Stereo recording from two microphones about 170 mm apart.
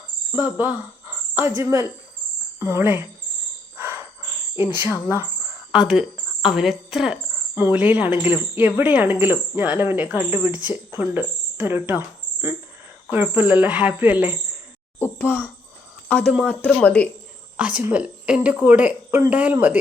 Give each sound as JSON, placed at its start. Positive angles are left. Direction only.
{"t": 0.3, "sound": "a woman's voice", "side_deg": -10}
{"t": 3.8, "sound": "a sound", "side_deg": -10}
{"t": 4.5, "sound": "a woman's voice", "side_deg": -10}
{"t": 14.9, "sound": "speech", "side_deg": 10}
{"t": 17.6, "sound": "a woman's voice", "side_deg": -10}